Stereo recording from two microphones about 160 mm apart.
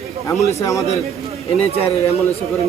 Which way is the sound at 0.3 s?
20° left (ahead or behind).